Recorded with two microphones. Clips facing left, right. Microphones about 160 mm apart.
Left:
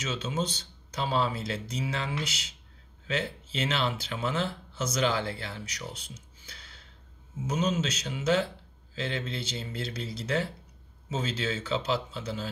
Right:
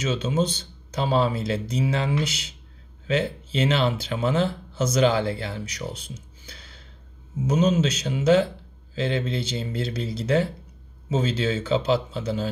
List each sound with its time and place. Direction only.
0.0 s speech: 20° right (ahead or behind)